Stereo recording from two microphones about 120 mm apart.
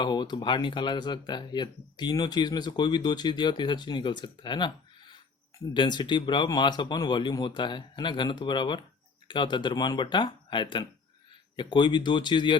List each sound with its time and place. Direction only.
0.0 s speech: 35° left (ahead or behind)
5.7 s speech: 40° left (ahead or behind)